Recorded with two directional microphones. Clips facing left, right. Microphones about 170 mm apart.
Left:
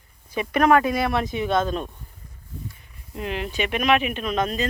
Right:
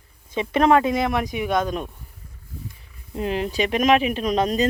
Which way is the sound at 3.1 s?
35° right (ahead or behind).